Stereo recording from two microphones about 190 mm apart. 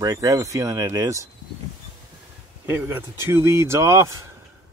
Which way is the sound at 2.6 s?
10° right (ahead or behind).